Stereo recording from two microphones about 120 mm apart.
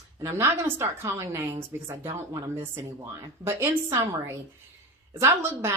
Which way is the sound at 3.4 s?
20° right (ahead or behind).